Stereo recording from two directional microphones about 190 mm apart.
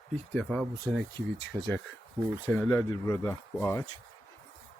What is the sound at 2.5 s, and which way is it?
Speech, 15° left (ahead or behind).